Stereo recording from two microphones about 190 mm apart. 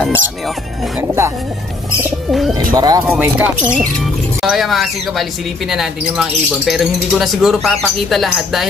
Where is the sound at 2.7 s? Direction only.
20° right (ahead or behind).